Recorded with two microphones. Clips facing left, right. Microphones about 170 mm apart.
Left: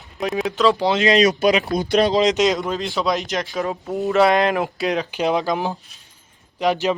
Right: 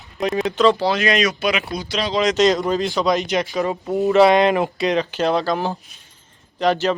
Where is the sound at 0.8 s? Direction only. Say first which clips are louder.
Left 2 dB; 20° left (ahead or behind).